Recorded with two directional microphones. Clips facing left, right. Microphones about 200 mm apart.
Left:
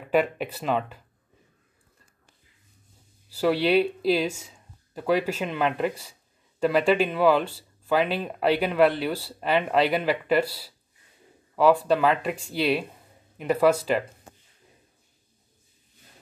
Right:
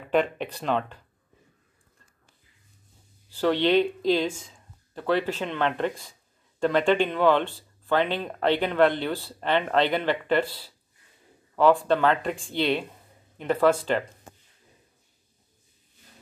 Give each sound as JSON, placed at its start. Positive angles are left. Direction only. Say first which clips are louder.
{"t": 0.1, "sound": "speech", "louder": "left 1 dB", "side_deg": 5}
{"t": 3.3, "sound": "speech", "louder": "even", "side_deg": 10}